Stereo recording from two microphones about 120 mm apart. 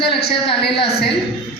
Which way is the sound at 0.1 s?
50° left (ahead or behind).